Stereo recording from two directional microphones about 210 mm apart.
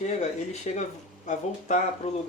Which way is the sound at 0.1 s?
30° left (ahead or behind).